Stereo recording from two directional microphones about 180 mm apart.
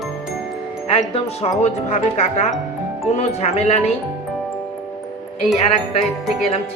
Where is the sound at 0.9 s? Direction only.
35° left (ahead or behind).